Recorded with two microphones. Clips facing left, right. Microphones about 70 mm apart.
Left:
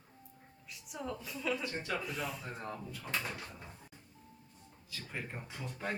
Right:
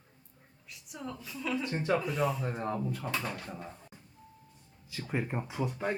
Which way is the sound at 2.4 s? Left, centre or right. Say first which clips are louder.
Right 9 dB; right.